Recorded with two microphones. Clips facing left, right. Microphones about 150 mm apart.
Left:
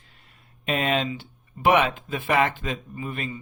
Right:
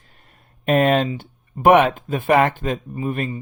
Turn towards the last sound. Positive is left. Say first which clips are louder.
# right 8 dB
turn(degrees=-45)  # may be behind; listen again after turning